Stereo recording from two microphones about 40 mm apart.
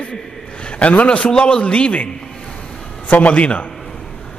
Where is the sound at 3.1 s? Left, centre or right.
Left.